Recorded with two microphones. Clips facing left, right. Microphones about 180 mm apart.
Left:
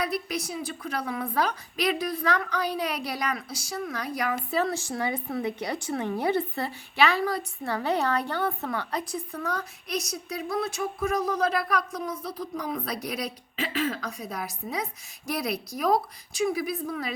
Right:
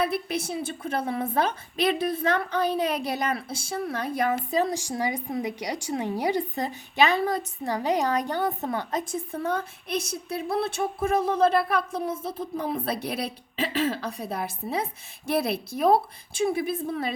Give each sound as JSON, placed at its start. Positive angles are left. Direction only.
{"t": 0.0, "sound": "a woman's voice", "side_deg": -25}